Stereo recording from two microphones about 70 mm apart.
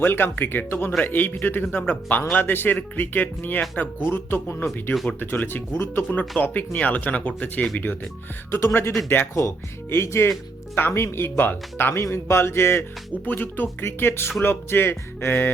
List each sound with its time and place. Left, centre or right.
0.0 s speech: left
8.4 s speech: left